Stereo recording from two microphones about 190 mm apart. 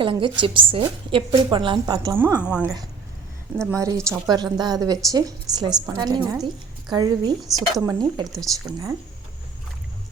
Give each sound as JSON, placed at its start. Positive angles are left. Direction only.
{"t": 0.0, "sound": "a woman's voice", "side_deg": -25}
{"t": 2.1, "sound": "a woman's voice", "side_deg": -10}
{"t": 3.7, "sound": "a woman's voice", "side_deg": -15}
{"t": 6.3, "sound": "a woman's voice", "side_deg": 0}
{"t": 6.9, "sound": "a woman's voice", "side_deg": -20}